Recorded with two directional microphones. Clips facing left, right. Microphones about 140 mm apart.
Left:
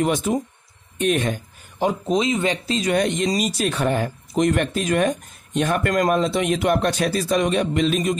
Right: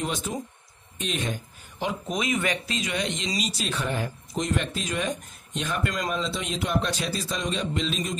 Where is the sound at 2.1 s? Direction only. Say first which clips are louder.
Left 5 dB; 25° left (ahead or behind).